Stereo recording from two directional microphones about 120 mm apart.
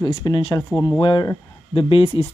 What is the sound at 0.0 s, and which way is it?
Speech, 40° left (ahead or behind).